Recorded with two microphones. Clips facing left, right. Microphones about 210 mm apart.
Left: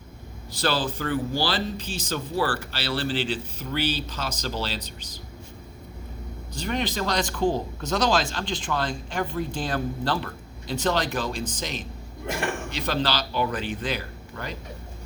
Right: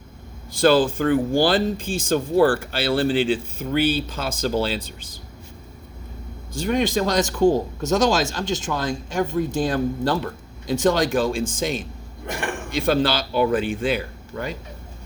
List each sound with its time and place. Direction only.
0.5 s speech: 50° right (ahead or behind)
6.5 s speech: 45° right (ahead or behind)